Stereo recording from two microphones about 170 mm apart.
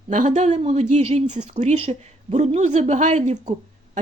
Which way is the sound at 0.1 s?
45° right (ahead or behind).